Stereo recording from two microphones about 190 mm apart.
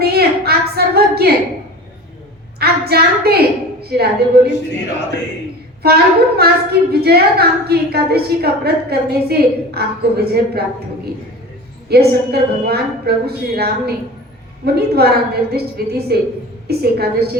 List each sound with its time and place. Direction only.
0.0 s a sound: 55° right (ahead or behind)
2.6 s a woman's voice: 55° right (ahead or behind)
5.8 s a woman's voice: 55° right (ahead or behind)
11.9 s a woman's voice: 55° right (ahead or behind)